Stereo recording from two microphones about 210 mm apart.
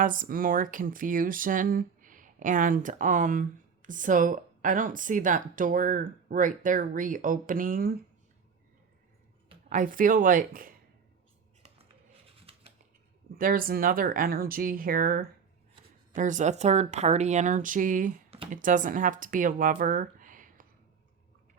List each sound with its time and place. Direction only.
0.0 s speech: 40° right (ahead or behind)
9.6 s speech: 40° right (ahead or behind)
13.3 s speech: 40° right (ahead or behind)